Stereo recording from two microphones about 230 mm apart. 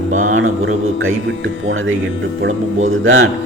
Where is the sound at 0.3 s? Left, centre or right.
Right.